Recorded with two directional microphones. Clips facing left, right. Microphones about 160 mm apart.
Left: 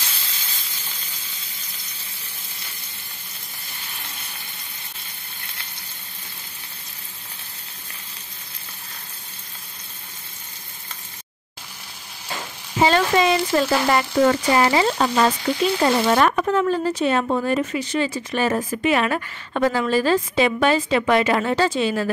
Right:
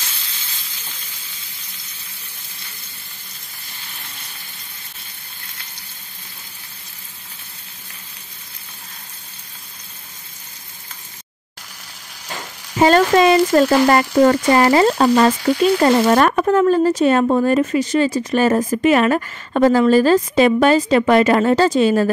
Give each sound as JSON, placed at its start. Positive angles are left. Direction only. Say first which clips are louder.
{"t": 12.8, "sound": "speech", "louder": "right 5 dB", "side_deg": -50}